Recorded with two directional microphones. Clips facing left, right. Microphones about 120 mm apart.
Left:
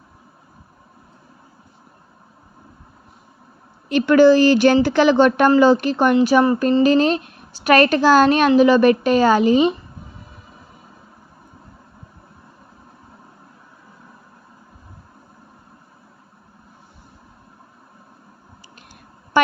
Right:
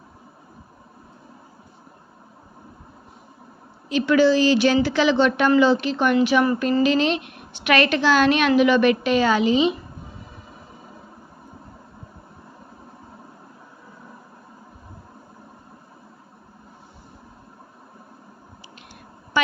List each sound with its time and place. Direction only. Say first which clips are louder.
3.8 s speech: left 5 dB; 55° left (ahead or behind)
6.1 s a woman's voice: left 3 dB; 35° left (ahead or behind)